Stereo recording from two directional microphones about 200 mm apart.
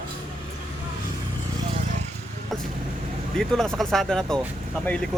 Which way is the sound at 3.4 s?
Centre (ahead or behind).